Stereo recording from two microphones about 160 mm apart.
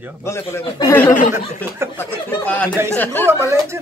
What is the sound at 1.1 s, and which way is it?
Speech, 50° left (ahead or behind).